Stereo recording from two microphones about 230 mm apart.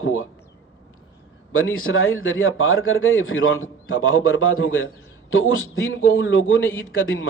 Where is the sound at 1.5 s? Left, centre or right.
Left.